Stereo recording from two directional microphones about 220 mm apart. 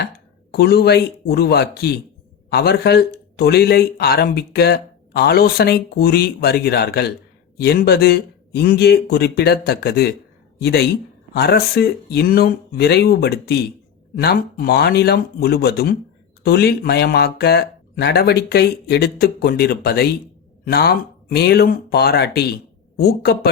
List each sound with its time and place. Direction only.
0.5 s speech: 45° left (ahead or behind)